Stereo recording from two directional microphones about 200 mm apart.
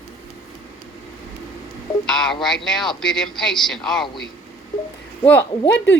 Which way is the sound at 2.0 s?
5° left (ahead or behind).